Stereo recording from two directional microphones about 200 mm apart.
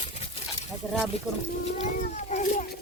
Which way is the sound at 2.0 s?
40° left (ahead or behind).